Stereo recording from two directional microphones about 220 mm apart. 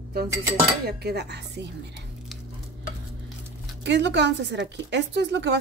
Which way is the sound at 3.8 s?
50° right (ahead or behind).